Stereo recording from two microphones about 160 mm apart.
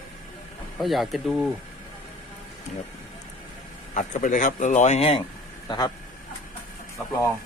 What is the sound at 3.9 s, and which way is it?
Speech, 50° left (ahead or behind).